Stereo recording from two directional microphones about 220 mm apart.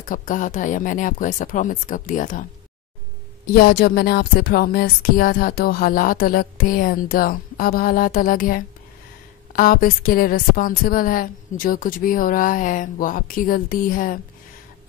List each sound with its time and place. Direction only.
0.1 s speech: 35° left (ahead or behind)
3.5 s speech: 45° left (ahead or behind)